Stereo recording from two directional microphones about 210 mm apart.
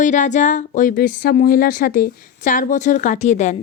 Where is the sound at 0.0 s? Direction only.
35° left (ahead or behind).